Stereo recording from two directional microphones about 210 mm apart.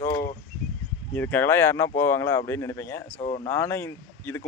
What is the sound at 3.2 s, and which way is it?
Speech, 25° left (ahead or behind).